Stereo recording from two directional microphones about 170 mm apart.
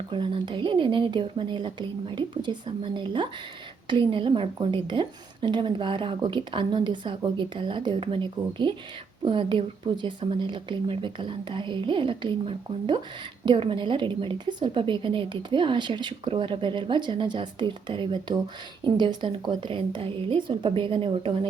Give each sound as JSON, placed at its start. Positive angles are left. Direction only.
{"t": 0.1, "sound": "a woman's voice", "side_deg": -30}